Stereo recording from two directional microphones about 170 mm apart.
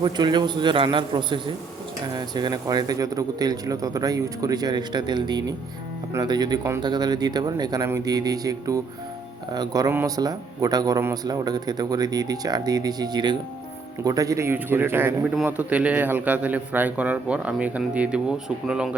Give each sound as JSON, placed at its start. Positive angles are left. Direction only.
{"t": 0.0, "sound": "a man's voice", "side_deg": -25}